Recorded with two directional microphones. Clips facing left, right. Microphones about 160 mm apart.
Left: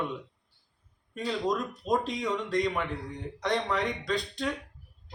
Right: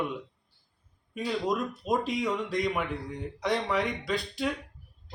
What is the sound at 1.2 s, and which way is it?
Speech, 5° right (ahead or behind).